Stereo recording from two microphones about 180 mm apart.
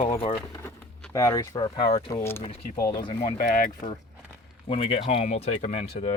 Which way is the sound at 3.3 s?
45° left (ahead or behind).